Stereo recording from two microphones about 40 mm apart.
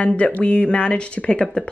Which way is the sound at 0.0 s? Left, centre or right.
Left.